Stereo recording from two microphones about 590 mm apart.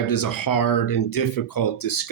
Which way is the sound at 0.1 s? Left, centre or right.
Left.